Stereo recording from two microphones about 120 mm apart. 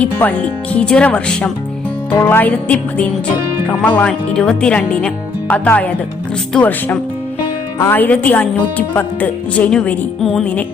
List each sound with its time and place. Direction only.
0.0 s speech: 15° left (ahead or behind)